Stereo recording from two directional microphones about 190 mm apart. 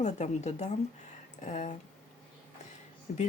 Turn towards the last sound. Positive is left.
turn(degrees=40)  # may be behind; listen again after turning